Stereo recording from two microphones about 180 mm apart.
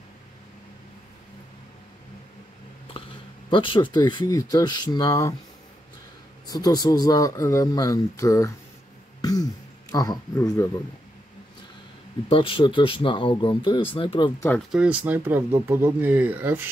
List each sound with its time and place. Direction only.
2.9 s a sound: 30° left (ahead or behind)
3.4 s speech: 30° left (ahead or behind)
6.4 s speech: 20° left (ahead or behind)
9.2 s throat clearing: 20° left (ahead or behind)
12.3 s speech: 30° left (ahead or behind)
14.7 s speech: 5° right (ahead or behind)